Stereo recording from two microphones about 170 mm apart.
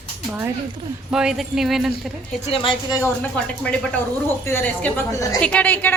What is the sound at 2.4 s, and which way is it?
Speech, 30° left (ahead or behind).